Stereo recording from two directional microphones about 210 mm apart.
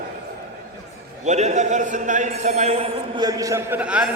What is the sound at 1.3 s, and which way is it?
A man's voice, 35° right (ahead or behind).